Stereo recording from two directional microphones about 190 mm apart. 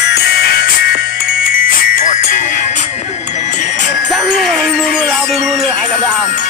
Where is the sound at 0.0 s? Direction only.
60° left (ahead or behind); by 3.8 s 40° left (ahead or behind).